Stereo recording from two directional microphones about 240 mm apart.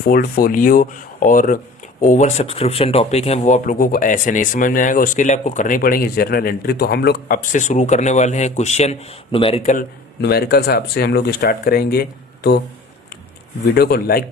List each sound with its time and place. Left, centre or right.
0.0 s speech: left
10.2 s speech: left
13.7 s speech: left